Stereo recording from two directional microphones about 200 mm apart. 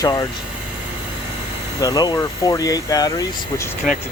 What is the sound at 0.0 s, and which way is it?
Speech, 15° left (ahead or behind).